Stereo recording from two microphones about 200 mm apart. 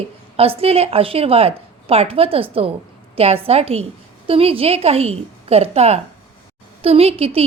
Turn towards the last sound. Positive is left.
turn(degrees=-30)  # may be behind; listen again after turning